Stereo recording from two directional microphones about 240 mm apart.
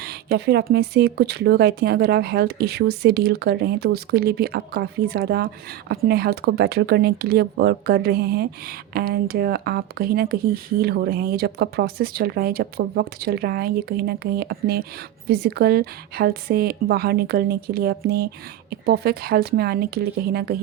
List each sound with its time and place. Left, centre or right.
0.0 s speech: right